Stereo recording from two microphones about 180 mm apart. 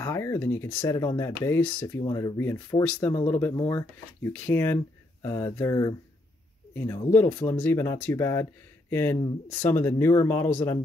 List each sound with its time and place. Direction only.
0.0 s speech: 15° left (ahead or behind)